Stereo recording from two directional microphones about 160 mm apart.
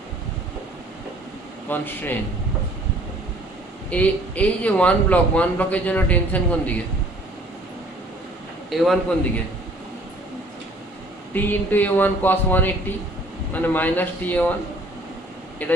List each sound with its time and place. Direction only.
1.7 s a man's voice: 10° left (ahead or behind)
3.8 s a man's voice: 10° left (ahead or behind)
8.7 s a man's voice: centre (ahead or behind)
11.3 s a man's voice: 10° left (ahead or behind)
15.6 s a man's voice: 10° left (ahead or behind)